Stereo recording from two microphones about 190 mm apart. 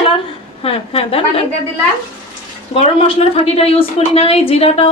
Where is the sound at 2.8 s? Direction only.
30° left (ahead or behind).